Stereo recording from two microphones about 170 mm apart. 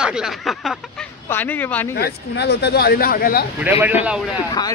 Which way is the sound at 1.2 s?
10° left (ahead or behind).